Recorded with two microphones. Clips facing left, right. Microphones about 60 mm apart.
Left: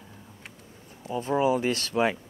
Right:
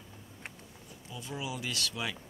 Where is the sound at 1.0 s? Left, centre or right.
Left.